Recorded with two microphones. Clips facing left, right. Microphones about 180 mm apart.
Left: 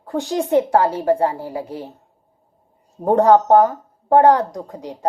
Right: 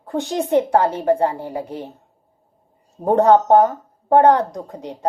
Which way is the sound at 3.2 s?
25° right (ahead or behind).